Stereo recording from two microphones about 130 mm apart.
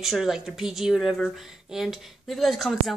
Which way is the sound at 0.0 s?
5° right (ahead or behind).